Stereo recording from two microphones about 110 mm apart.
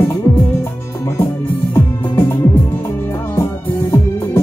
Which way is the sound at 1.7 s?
20° left (ahead or behind).